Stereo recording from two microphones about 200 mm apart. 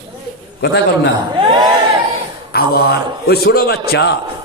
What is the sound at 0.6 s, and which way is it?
Speech, 55° left (ahead or behind).